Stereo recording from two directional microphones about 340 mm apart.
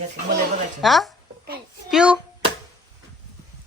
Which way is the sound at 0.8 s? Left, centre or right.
Centre.